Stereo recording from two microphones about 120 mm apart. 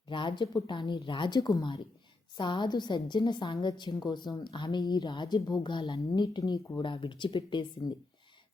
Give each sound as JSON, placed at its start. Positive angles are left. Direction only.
{"t": 0.1, "sound": "a woman's voice", "side_deg": 40}